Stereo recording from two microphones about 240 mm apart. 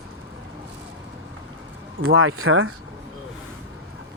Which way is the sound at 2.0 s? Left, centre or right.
Right.